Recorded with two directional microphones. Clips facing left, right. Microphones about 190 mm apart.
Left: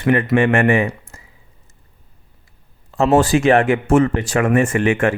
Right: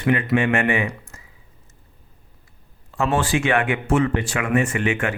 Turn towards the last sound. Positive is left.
turn(degrees=45)  # may be behind; listen again after turning